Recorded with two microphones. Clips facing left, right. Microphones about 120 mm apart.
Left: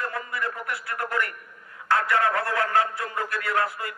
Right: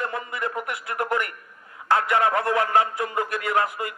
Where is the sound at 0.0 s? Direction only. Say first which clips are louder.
Right 2 dB; 20° right (ahead or behind).